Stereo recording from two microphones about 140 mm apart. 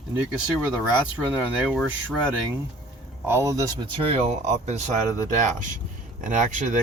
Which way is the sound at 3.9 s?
45° right (ahead or behind).